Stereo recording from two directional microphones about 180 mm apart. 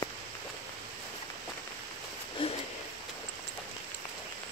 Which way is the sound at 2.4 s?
30° left (ahead or behind).